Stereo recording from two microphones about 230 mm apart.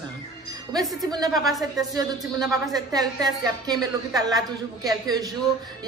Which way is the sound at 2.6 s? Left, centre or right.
Centre.